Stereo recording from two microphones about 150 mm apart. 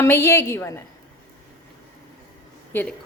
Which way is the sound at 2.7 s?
15° left (ahead or behind).